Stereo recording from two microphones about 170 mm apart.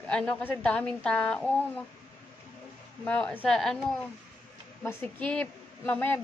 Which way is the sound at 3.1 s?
5° left (ahead or behind).